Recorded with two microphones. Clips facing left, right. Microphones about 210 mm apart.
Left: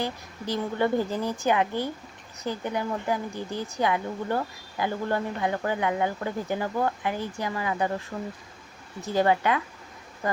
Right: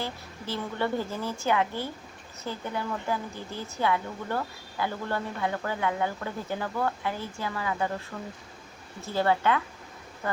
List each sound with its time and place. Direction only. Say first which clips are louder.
0.0 s speech: left 4 dB; 15° left (ahead or behind)
8.1 s speech: left 4 dB; 30° left (ahead or behind)
9.0 s speech: left 3 dB; 15° left (ahead or behind)